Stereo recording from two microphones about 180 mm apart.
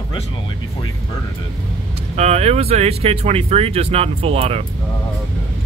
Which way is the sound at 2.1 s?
35° right (ahead or behind).